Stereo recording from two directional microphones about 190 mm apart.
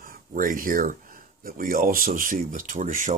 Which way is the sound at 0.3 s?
45° right (ahead or behind).